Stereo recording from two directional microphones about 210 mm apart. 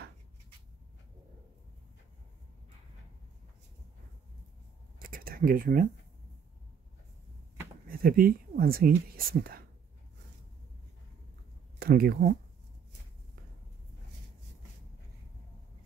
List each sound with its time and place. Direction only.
4.9 s a sound: 45° right (ahead or behind)
7.9 s speech: 45° right (ahead or behind)
11.8 s speech: 45° right (ahead or behind)